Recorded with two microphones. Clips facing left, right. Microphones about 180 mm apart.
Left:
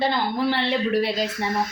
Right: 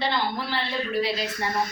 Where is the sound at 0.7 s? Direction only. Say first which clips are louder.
Left 5 dB; 75° left (ahead or behind).